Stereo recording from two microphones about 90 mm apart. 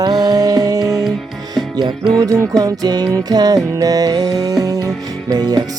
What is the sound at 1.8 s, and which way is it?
Music, 55° right (ahead or behind).